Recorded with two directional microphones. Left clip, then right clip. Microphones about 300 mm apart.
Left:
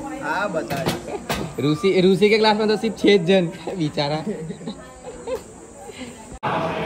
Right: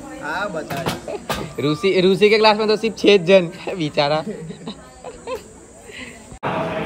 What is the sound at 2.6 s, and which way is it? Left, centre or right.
Speech, centre.